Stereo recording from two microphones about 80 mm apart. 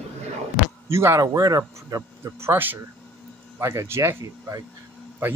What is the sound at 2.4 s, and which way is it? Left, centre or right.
Speech, right.